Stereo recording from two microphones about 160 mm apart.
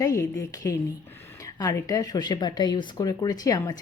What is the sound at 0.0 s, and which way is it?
Speech, 20° left (ahead or behind).